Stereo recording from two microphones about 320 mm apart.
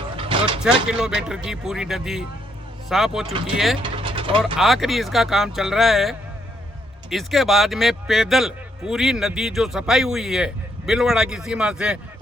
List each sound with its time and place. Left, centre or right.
0.2 s a sound: centre
0.6 s speech: centre
3.8 s vehicle: centre
4.5 s speech: centre